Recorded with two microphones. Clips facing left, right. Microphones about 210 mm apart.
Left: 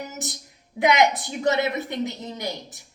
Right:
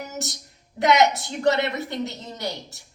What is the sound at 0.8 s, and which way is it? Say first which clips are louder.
Speech: right 1 dB; 10° left (ahead or behind).